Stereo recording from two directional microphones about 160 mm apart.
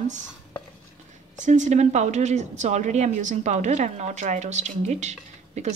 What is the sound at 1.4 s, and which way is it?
A woman's voice, 50° right (ahead or behind).